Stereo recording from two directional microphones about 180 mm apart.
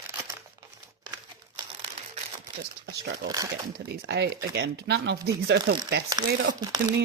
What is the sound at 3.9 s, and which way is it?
Speech, 65° right (ahead or behind).